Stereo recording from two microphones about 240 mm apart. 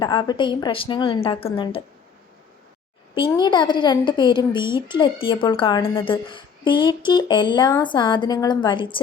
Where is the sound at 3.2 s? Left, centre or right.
Centre.